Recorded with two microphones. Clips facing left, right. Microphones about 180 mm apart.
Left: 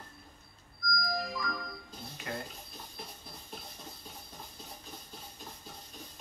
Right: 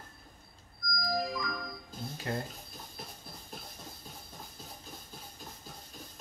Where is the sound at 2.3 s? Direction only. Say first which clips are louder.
Right 4 dB; 35° right (ahead or behind).